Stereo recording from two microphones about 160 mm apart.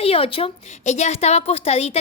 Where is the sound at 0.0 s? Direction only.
35° left (ahead or behind).